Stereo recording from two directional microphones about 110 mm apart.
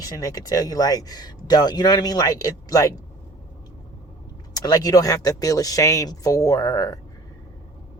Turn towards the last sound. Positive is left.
turn(degrees=30)  # may be behind; listen again after turning